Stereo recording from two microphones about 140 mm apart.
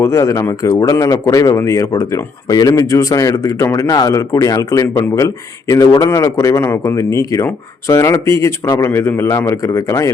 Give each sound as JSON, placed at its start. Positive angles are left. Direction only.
{"t": 0.0, "sound": "speech", "side_deg": 20}